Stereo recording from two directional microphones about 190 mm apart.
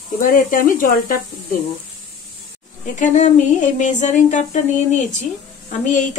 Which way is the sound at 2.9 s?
40° left (ahead or behind).